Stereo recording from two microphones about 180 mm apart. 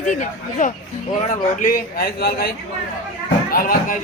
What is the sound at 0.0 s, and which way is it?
A man's voice, 45° left (ahead or behind).